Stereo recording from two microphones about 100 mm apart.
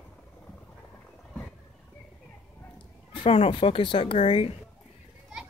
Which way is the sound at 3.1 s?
70° left (ahead or behind).